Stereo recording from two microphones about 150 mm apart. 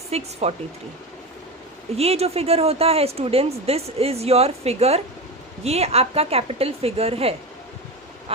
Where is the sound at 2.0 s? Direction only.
45° right (ahead or behind).